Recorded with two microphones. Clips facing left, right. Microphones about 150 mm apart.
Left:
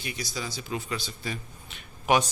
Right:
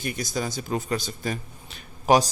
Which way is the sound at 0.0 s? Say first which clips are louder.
Right 6 dB; 50° right (ahead or behind).